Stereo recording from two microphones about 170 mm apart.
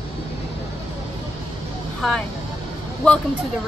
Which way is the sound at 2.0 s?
5° left (ahead or behind).